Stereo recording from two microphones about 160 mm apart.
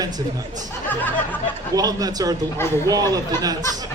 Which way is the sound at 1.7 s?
25° right (ahead or behind).